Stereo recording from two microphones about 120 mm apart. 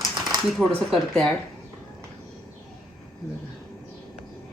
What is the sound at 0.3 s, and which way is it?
A woman's voice, centre (ahead or behind).